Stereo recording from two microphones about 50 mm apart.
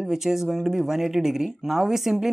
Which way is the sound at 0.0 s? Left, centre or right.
Centre.